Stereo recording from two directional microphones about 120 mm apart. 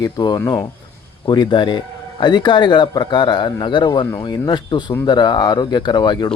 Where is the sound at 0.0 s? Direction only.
40° left (ahead or behind).